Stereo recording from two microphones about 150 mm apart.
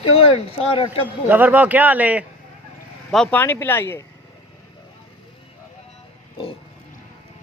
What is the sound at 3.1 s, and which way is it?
Speech, 5° left (ahead or behind).